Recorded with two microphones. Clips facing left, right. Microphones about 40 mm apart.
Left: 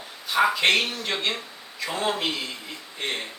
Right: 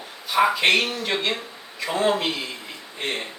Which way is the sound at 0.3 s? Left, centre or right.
Centre.